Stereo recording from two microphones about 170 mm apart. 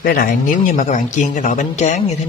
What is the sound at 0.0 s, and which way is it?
Speech, 55° left (ahead or behind).